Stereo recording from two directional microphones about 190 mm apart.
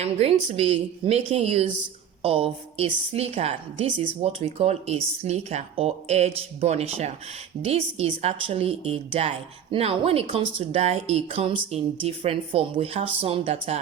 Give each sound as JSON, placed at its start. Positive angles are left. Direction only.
{"t": 0.0, "sound": "a woman's voice", "side_deg": -30}